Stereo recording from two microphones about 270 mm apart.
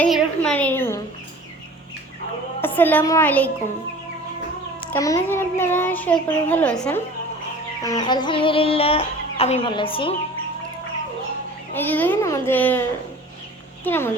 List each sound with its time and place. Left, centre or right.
0.0 s a child's voice: centre
2.6 s a woman's voice: centre
4.9 s a child's voice: centre
7.8 s music: centre
11.7 s a child's voice: centre
13.8 s a child's voice: centre